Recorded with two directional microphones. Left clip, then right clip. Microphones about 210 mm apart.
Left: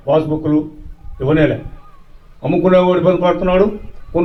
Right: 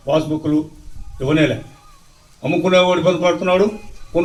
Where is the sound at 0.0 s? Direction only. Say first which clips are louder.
Left 3 dB; 45° left (ahead or behind).